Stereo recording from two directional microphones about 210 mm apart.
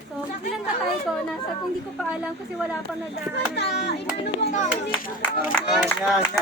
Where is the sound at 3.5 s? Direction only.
55° left (ahead or behind).